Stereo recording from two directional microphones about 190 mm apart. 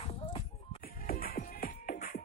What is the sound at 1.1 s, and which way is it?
Music, 50° left (ahead or behind).